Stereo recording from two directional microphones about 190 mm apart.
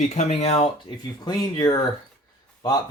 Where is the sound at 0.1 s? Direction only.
35° left (ahead or behind).